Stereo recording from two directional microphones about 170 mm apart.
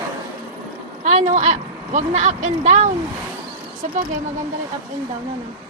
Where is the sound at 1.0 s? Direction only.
45° right (ahead or behind).